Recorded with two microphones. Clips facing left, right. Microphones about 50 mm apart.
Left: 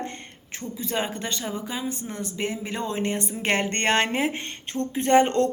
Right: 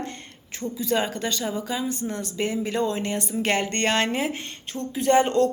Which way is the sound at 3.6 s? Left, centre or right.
Left.